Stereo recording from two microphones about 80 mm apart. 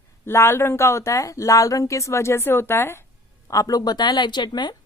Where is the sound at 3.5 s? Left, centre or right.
Left.